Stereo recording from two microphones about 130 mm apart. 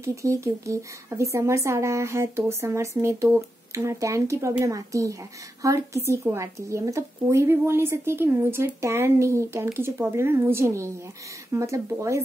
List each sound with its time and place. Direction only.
0.0 s speech: 25° right (ahead or behind)